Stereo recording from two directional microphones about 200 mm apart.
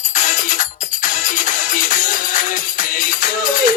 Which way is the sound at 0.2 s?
40° left (ahead or behind).